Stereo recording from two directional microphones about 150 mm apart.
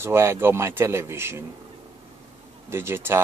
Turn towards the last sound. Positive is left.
turn(degrees=-15)  # may be behind; listen again after turning